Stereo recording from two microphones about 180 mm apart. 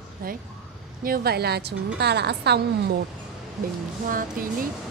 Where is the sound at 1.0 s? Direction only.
55° right (ahead or behind).